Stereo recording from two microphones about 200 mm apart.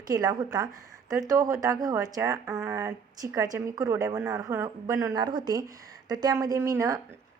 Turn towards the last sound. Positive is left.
turn(degrees=-15)  # may be behind; listen again after turning